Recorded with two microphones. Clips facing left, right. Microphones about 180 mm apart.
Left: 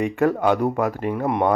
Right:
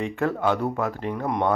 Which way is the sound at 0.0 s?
15° left (ahead or behind).